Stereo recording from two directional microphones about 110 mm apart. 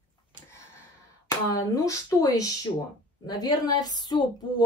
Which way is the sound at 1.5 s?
35° left (ahead or behind).